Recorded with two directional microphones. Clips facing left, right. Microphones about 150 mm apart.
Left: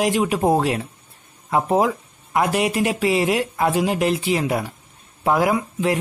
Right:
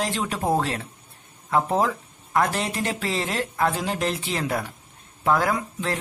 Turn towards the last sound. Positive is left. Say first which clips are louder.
# left 6 dB
turn(degrees=10)  # may be behind; listen again after turning